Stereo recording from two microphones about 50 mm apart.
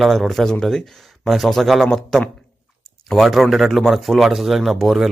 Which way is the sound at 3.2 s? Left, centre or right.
Centre.